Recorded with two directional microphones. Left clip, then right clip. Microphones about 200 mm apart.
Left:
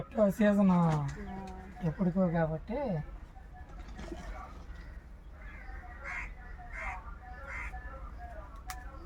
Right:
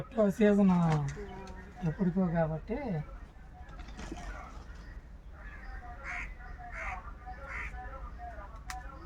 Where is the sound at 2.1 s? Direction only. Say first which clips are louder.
Left 1 dB; 20° left (ahead or behind).